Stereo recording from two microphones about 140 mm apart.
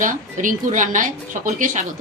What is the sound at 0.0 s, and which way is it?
A woman's voice, 65° right (ahead or behind).